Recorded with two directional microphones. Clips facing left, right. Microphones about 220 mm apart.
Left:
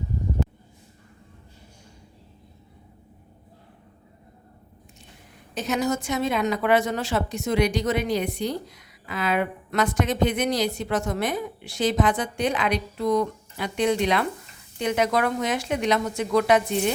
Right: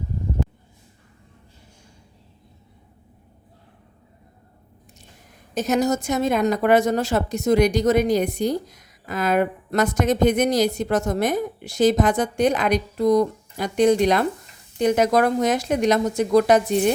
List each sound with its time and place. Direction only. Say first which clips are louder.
5.5 s a woman's voice: right 4 dB; 40° right (ahead or behind)